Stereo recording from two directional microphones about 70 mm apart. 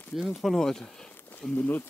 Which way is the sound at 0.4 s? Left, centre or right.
Centre.